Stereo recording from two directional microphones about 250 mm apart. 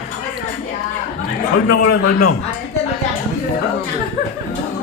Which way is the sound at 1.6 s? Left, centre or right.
Left.